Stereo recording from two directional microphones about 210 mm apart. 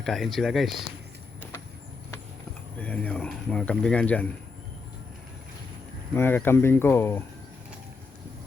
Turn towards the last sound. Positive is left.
turn(degrees=10)  # may be behind; listen again after turning